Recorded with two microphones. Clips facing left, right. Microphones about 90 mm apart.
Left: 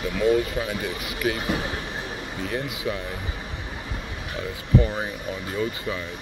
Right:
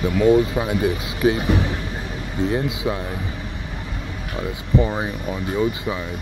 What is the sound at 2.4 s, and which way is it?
Speech, 25° right (ahead or behind).